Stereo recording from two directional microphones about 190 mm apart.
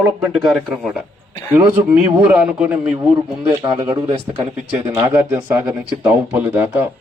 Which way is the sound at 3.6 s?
25° right (ahead or behind).